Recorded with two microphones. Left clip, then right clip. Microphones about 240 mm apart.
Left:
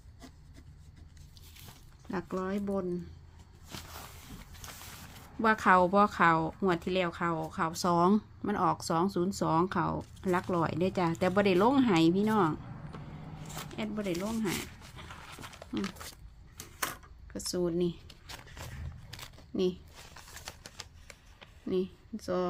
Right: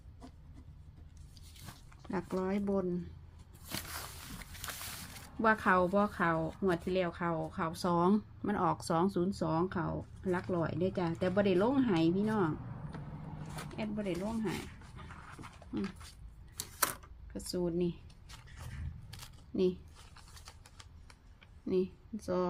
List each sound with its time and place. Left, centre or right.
2.0 s speech: centre
5.4 s speech: centre
13.7 s speech: left
14.9 s a sound: left
17.5 s speech: centre
19.1 s a sound: centre
21.7 s speech: centre